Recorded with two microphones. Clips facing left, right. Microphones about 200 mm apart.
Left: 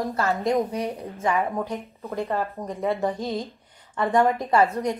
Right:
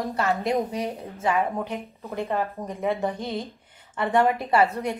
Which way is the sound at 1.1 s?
20° right (ahead or behind).